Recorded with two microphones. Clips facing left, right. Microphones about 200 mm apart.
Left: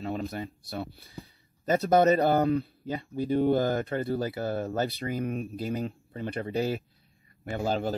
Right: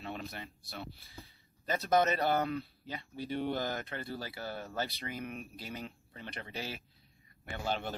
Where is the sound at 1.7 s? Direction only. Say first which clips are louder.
Left 8 dB; 35° left (ahead or behind).